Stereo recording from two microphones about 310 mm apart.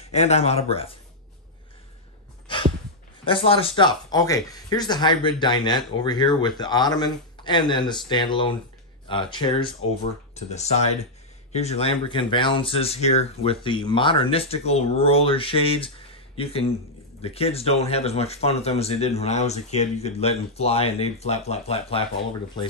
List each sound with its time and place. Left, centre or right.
0.0 s speech: left
2.4 s sigh: centre
3.3 s speech: centre